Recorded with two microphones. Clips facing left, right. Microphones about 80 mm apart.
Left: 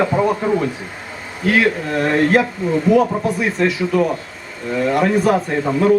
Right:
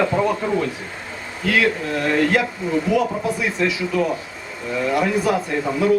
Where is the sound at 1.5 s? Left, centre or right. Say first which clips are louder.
Left 2 dB; left.